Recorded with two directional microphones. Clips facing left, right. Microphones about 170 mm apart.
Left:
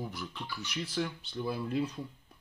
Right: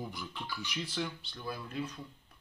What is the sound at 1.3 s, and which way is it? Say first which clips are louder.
Speech: left 8 dB; 25° left (ahead or behind).